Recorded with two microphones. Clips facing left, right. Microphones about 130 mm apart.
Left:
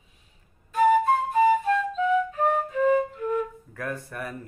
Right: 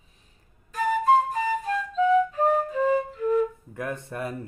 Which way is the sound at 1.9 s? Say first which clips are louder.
Right 3 dB; 35° right (ahead or behind).